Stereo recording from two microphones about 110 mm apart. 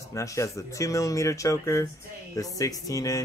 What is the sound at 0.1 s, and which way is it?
Speech, 30° left (ahead or behind).